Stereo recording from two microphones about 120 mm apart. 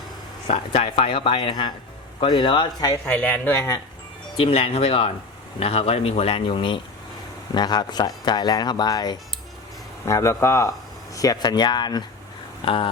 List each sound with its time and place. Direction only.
0.4 s speech: 60° left (ahead or behind); by 3.0 s 40° left (ahead or behind)
3.1 s speech: 10° left (ahead or behind)
4.4 s speech: 55° left (ahead or behind); by 12.0 s 35° left (ahead or behind)
12.6 s speech: 45° left (ahead or behind)